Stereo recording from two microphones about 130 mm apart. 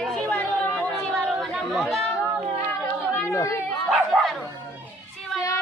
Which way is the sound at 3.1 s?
20° left (ahead or behind).